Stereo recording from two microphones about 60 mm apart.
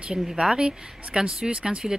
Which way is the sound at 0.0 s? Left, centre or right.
Centre.